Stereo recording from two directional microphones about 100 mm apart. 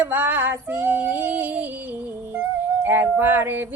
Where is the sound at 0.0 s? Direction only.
20° right (ahead or behind).